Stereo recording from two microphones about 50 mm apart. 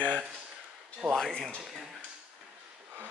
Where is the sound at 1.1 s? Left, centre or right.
Centre.